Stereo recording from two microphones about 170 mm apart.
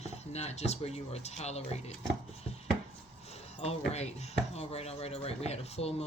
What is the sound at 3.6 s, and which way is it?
Speech, 40° left (ahead or behind).